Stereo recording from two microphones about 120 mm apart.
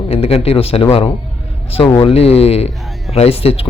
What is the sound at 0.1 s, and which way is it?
Speech, 55° left (ahead or behind).